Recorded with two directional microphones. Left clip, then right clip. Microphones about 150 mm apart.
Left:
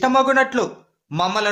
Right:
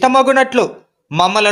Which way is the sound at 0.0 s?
25° right (ahead or behind).